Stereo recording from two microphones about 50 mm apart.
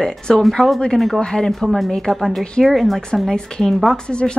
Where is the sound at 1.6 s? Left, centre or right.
Centre.